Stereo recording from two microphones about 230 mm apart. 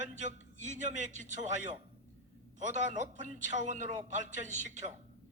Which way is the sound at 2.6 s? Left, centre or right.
Right.